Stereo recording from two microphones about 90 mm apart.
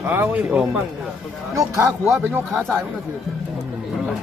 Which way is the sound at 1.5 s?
35° right (ahead or behind).